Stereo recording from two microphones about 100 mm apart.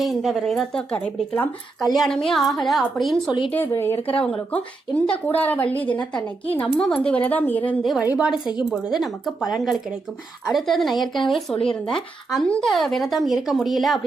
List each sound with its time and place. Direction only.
0.0 s speech: centre (ahead or behind)
1.8 s speech: centre (ahead or behind)
3.7 s speech: 25° left (ahead or behind)
8.0 s a woman's voice: 15° right (ahead or behind)
8.8 s speech: 5° right (ahead or behind)
10.5 s speech: centre (ahead or behind)